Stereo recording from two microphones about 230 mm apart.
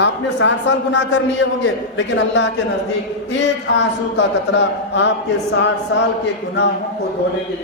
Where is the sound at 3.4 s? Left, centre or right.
Left.